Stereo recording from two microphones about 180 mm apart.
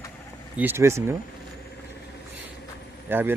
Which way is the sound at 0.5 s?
10° right (ahead or behind).